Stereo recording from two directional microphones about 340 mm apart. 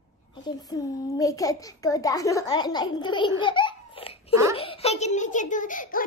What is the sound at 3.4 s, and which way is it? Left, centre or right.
Laughter, centre.